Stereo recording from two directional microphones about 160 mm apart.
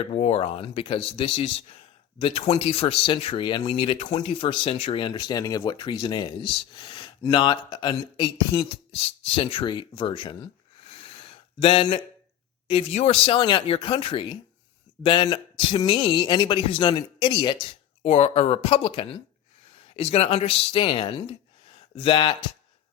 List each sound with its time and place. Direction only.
0.0 s speech: 40° left (ahead or behind)
10.8 s a sound: 35° left (ahead or behind)
12.6 s speech: 40° left (ahead or behind)
18.0 s speech: 40° left (ahead or behind)
20.1 s speech: 40° left (ahead or behind)